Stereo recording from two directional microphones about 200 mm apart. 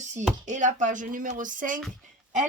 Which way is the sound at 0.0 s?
35° right (ahead or behind).